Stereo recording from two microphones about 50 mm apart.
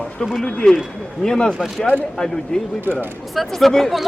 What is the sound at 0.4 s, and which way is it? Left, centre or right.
Speech, centre.